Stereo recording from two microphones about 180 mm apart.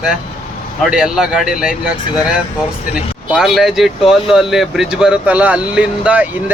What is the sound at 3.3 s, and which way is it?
Speech, centre (ahead or behind).